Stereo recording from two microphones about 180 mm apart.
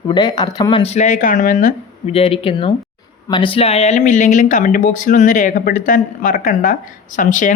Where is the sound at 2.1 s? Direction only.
30° left (ahead or behind).